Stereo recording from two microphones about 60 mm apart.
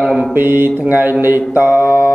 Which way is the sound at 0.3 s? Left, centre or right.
Right.